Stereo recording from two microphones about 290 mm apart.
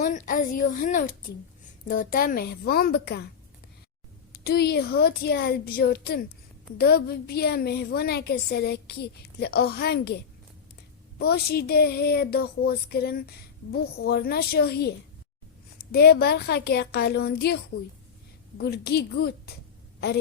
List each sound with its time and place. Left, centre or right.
0.0 s a woman's voice: left
4.3 s a woman's voice: left
11.2 s a woman's voice: left